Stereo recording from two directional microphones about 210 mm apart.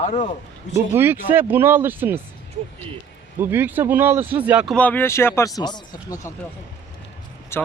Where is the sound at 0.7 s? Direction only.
10° right (ahead or behind).